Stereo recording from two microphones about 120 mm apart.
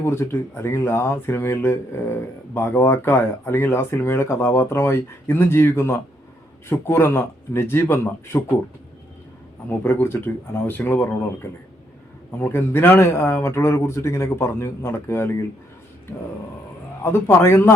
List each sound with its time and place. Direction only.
0.0 s speech: 20° left (ahead or behind)
9.6 s speech: 20° left (ahead or behind)
12.4 s speech: 20° left (ahead or behind)
17.0 s speech: 20° left (ahead or behind)